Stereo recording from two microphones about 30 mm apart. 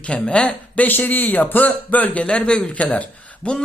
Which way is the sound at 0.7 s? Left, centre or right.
Left.